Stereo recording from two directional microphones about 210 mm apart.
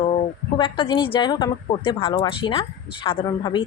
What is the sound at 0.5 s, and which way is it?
A woman's voice, 25° left (ahead or behind).